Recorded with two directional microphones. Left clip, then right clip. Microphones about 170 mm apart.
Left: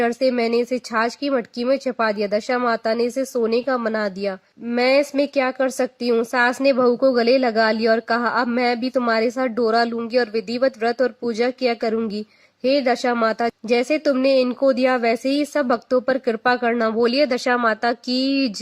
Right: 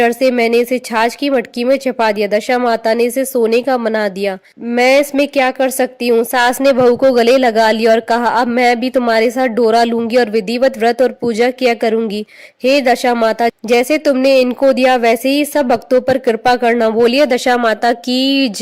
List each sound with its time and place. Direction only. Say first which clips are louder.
0.0 s speech: right 7 dB; 35° right (ahead or behind)